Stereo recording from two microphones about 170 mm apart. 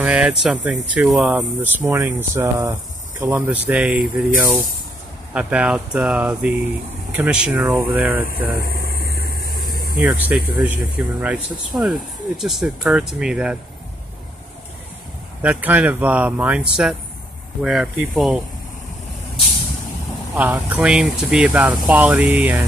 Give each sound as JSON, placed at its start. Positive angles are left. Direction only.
{"t": 0.0, "sound": "speech", "side_deg": -5}
{"t": 8.5, "sound": "a sound", "side_deg": 60}
{"t": 10.0, "sound": "speech", "side_deg": -10}
{"t": 15.4, "sound": "speech", "side_deg": -10}
{"t": 20.3, "sound": "speech", "side_deg": -10}